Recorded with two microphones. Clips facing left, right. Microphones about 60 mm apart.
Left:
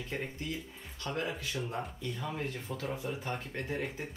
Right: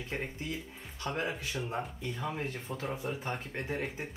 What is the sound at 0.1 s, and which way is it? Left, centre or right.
Speech, right.